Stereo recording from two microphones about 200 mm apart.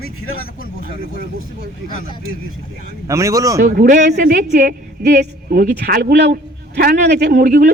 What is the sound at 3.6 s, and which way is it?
A woman's voice, 45° right (ahead or behind).